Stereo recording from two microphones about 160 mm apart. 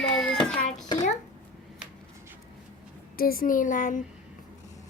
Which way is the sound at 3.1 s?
65° left (ahead or behind).